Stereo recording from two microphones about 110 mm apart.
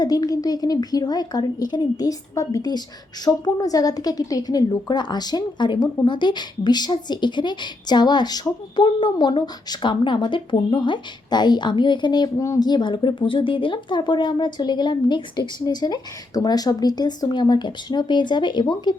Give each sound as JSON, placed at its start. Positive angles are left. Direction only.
{"t": 0.0, "sound": "a woman's voice", "side_deg": 35}